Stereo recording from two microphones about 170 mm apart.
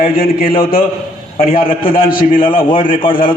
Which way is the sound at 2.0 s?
55° left (ahead or behind).